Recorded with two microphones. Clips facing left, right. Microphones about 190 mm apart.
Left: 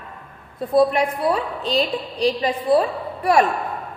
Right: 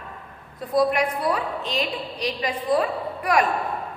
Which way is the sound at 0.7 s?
30° left (ahead or behind).